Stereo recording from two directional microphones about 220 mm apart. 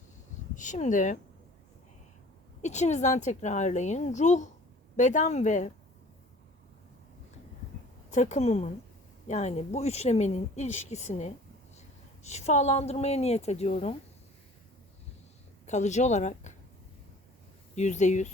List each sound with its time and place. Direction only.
0.5 s speech: 35° left (ahead or behind)
2.6 s speech: 30° left (ahead or behind)
8.1 s a woman's voice: 30° left (ahead or behind)
15.6 s speech: 30° left (ahead or behind)
17.7 s speech: 30° left (ahead or behind)